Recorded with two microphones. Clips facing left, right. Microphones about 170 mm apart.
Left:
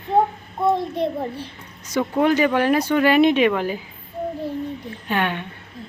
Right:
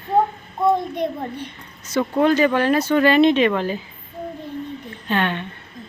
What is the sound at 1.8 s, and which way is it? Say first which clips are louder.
Speech: right 1 dB; 15° left (ahead or behind).